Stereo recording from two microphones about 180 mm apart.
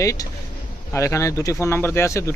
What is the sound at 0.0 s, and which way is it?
Speech, 15° left (ahead or behind).